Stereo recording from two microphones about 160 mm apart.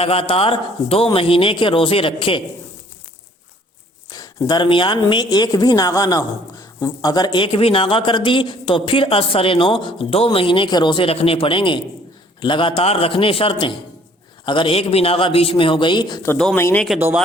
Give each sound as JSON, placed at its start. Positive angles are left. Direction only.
{"t": 0.0, "sound": "speech", "side_deg": 35}
{"t": 4.1, "sound": "speech", "side_deg": 25}
{"t": 16.3, "sound": "speech", "side_deg": 5}
{"t": 16.6, "sound": "speech", "side_deg": 15}